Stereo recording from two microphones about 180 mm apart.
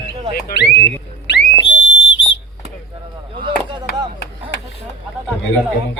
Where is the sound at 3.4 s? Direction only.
25° right (ahead or behind).